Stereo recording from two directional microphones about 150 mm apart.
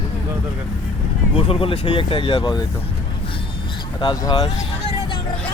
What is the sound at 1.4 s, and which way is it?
Speech, 35° left (ahead or behind).